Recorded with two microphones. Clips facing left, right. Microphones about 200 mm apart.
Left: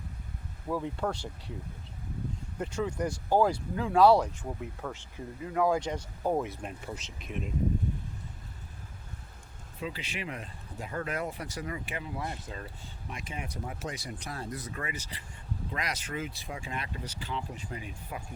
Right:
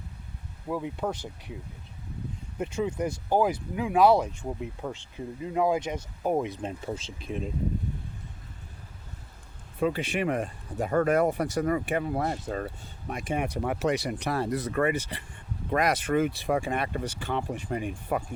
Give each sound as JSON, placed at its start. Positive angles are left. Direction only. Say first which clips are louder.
{"t": 0.7, "sound": "speech", "louder": "right 1 dB", "side_deg": -15}
{"t": 2.6, "sound": "speech", "louder": "right 3 dB", "side_deg": -20}
{"t": 9.8, "sound": "speech", "louder": "right 11 dB", "side_deg": -55}